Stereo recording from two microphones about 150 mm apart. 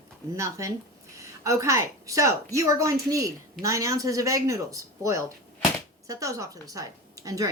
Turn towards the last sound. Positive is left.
turn(degrees=-20)  # may be behind; listen again after turning